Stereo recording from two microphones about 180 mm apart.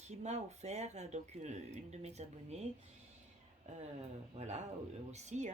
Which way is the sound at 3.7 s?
40° right (ahead or behind).